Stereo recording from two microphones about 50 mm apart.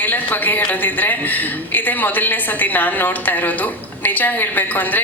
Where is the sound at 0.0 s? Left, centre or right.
Left.